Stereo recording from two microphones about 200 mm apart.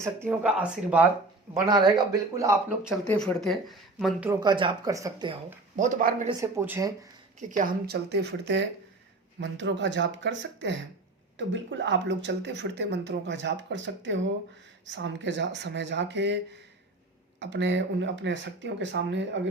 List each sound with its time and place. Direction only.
0.0 s speech: 10° right (ahead or behind)
1.6 s speech: 20° right (ahead or behind); by 4.3 s centre (ahead or behind)
4.3 s speech: 20° right (ahead or behind)
5.7 s speech: 40° right (ahead or behind)
6.4 s speech: 10° right (ahead or behind)
7.3 s speech: 40° right (ahead or behind); by 19.4 s 65° right (ahead or behind)